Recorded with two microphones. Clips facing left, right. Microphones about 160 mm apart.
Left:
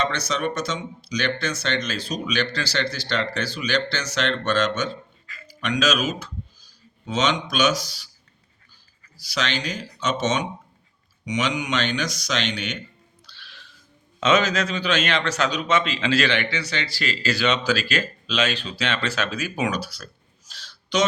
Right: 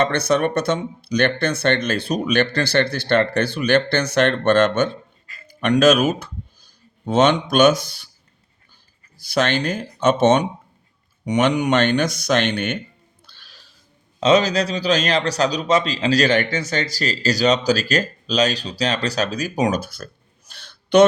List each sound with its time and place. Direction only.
0.0 s speech: 55° right (ahead or behind)
9.1 s speech: 55° right (ahead or behind)
13.2 s music: 45° right (ahead or behind)
14.2 s a man's voice: 35° right (ahead or behind); by 20.1 s 50° right (ahead or behind)
20.5 s a sound: 55° right (ahead or behind)